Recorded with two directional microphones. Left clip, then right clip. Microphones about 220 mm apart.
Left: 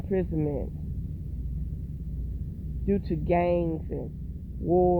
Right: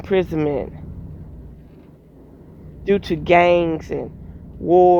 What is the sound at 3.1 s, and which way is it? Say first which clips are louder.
Speech: right 12 dB; 75° right (ahead or behind).